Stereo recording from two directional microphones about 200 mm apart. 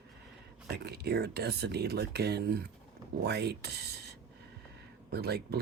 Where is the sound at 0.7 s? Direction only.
55° right (ahead or behind).